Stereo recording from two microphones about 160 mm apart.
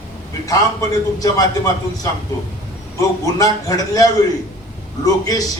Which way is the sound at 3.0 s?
20° left (ahead or behind).